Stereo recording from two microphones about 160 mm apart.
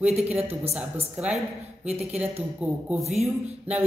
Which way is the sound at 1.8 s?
40° right (ahead or behind).